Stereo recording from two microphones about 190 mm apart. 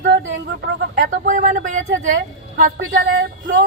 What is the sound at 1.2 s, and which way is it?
Speech, 45° right (ahead or behind).